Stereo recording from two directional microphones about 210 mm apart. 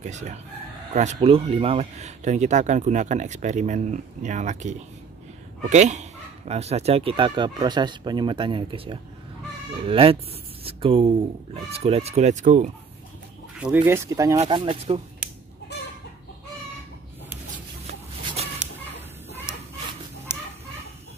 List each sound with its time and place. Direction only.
0.0 s speech: 35° right (ahead or behind)
13.6 s speech: 5° right (ahead or behind); by 15.0 s 25° right (ahead or behind)
18.4 s chicken: 30° right (ahead or behind)